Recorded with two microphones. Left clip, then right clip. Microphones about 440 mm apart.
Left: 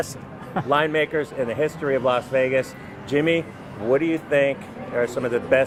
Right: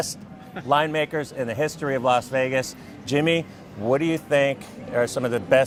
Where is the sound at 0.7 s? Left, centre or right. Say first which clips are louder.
Left 1 dB; right.